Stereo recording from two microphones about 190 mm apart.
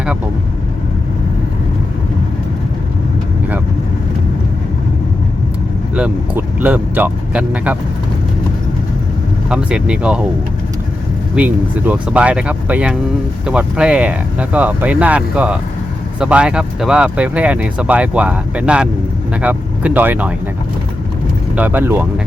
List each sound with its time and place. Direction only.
5.9 s speech: 5° right (ahead or behind)
9.5 s speech: 5° right (ahead or behind)
11.3 s speech: 5° right (ahead or behind)
21.5 s speech: 10° right (ahead or behind)